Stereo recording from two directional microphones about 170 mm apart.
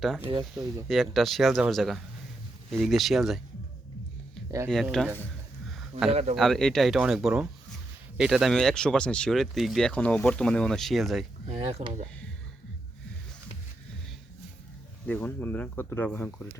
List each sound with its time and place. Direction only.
0.3 s speech: 25° right (ahead or behind)
0.9 s speech: centre (ahead or behind)
4.7 s speech: centre (ahead or behind)
6.1 s speech: 40° right (ahead or behind)
6.3 s speech: centre (ahead or behind)
11.4 s speech: 35° right (ahead or behind)
15.0 s speech: 10° left (ahead or behind)